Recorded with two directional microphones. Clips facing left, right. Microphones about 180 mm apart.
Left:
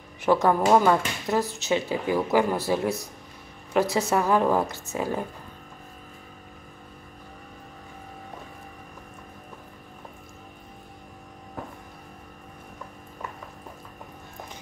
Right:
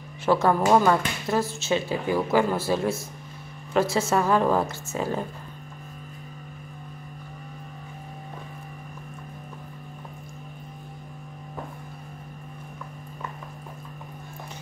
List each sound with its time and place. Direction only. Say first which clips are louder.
0.2 s speech: even; 15° left (ahead or behind)